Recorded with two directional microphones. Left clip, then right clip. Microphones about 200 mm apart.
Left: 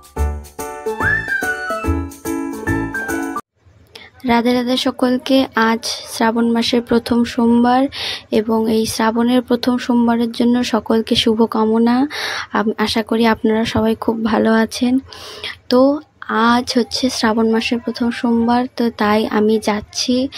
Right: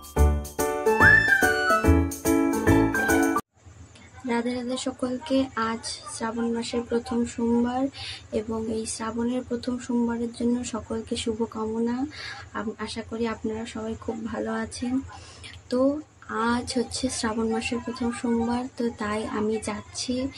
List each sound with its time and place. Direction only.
0.1 s music: centre (ahead or behind)
4.3 s speech: 50° left (ahead or behind)